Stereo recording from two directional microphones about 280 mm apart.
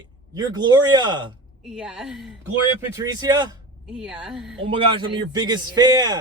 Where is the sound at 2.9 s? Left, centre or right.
Centre.